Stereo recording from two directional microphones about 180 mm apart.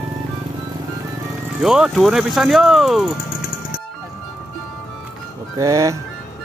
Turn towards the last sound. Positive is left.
turn(degrees=-15)  # may be behind; listen again after turning